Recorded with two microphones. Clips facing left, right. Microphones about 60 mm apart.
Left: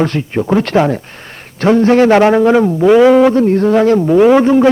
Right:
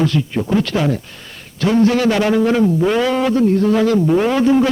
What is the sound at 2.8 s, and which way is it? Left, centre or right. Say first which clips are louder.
Speech: left 9 dB; centre.